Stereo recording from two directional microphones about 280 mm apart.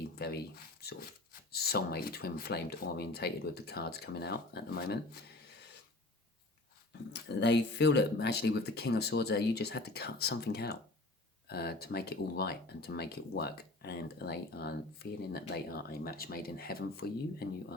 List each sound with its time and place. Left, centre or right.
0.2 s speech: left
7.1 s speech: left